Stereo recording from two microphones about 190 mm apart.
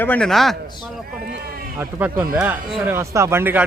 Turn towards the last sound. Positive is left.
turn(degrees=-10)  # may be behind; listen again after turning